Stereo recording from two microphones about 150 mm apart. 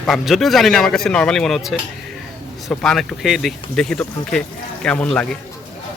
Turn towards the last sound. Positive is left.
turn(degrees=5)  # may be behind; listen again after turning